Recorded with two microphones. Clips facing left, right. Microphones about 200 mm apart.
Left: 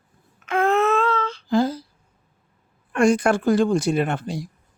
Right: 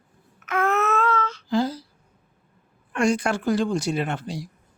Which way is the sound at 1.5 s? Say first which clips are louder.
Left 3 dB; 50° left (ahead or behind).